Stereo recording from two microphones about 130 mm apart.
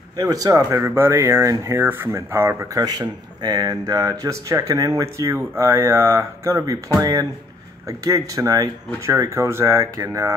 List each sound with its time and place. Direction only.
0.2 s speech: 25° right (ahead or behind)